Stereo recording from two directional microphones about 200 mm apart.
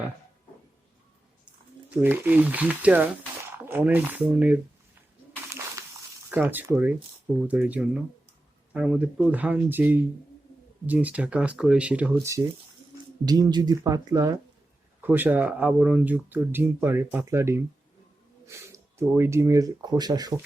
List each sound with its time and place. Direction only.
2.0 s speech: 10° right (ahead or behind)
6.3 s speech: 10° right (ahead or behind)